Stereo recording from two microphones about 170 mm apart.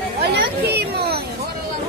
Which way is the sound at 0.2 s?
70° right (ahead or behind).